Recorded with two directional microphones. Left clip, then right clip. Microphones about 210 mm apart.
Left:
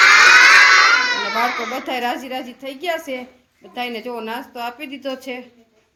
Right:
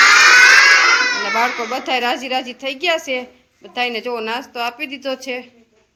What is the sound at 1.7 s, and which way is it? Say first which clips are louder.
A woman's voice: right 4 dB; centre (ahead or behind).